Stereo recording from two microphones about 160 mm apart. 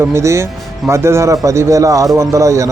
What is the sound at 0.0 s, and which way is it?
Speech, 15° right (ahead or behind).